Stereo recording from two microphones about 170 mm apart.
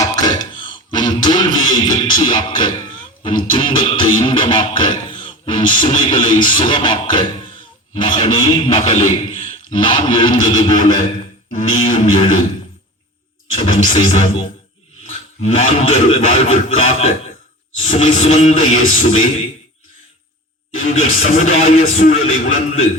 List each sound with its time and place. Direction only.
0.0 s music: 25° left (ahead or behind)
8.9 s a man's voice: 45° left (ahead or behind)
9.7 s music: 30° left (ahead or behind)
10.8 s a man's voice: 50° left (ahead or behind)
13.5 s a man's voice: 45° left (ahead or behind)
20.8 s a man's voice: 45° left (ahead or behind)